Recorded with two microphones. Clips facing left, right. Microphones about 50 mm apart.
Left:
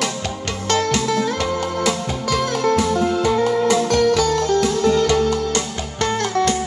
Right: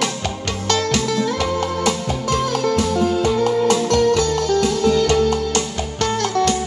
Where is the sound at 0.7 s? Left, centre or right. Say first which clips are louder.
Left 1 dB; left.